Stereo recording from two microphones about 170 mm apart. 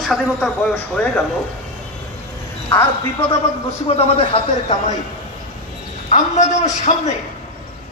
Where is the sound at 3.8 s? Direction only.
35° left (ahead or behind).